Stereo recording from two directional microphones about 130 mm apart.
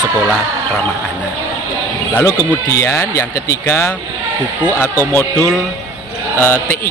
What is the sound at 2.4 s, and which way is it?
A man's voice, 20° left (ahead or behind).